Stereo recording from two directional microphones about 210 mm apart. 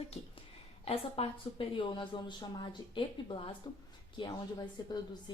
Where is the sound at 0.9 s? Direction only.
25° left (ahead or behind).